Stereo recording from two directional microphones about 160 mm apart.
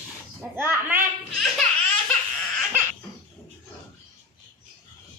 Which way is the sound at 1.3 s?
Centre (ahead or behind).